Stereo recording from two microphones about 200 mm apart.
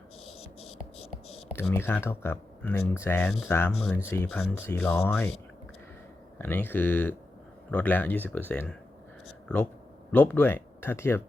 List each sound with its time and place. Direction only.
0.3 s scratch: 30° left (ahead or behind)
1.7 s speech: 10° left (ahead or behind)
3.8 s speech: centre (ahead or behind)
4.0 s speech: 10° left (ahead or behind)
6.4 s speech: 10° left (ahead or behind)
10.1 s speech: 10° left (ahead or behind)